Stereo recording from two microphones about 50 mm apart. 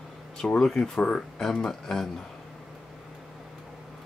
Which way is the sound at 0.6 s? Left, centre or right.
Centre.